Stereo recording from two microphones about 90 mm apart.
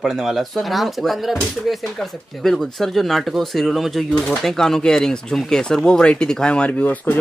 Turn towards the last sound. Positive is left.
turn(degrees=15)  # may be behind; listen again after turning